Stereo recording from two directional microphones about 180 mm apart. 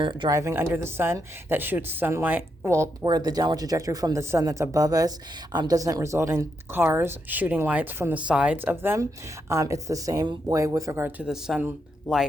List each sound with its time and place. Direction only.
0.0 s speech: 25° right (ahead or behind); by 12.2 s 5° right (ahead or behind)